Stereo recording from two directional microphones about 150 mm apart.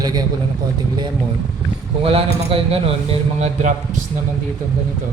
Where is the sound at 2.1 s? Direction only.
40° right (ahead or behind).